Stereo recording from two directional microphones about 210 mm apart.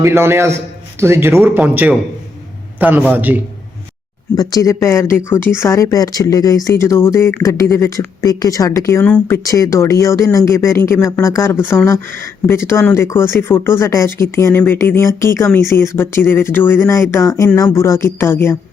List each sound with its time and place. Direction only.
0.0 s speech: 10° right (ahead or behind)
4.4 s speech: 15° left (ahead or behind)